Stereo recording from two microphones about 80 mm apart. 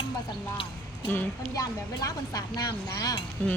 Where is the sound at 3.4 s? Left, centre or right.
Centre.